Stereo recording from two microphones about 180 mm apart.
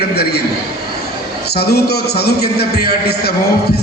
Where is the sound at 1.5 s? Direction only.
60° left (ahead or behind).